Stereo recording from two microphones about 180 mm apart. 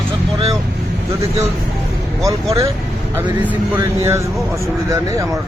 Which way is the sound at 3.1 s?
10° right (ahead or behind).